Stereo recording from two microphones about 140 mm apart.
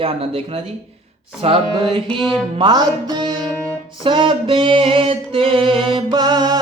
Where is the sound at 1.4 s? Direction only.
40° right (ahead or behind).